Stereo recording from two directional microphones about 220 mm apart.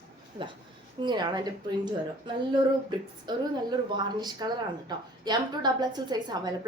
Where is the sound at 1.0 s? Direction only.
20° right (ahead or behind).